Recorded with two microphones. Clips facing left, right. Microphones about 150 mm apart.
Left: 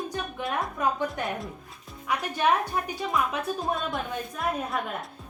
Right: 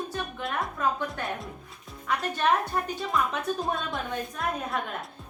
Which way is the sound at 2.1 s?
10° left (ahead or behind).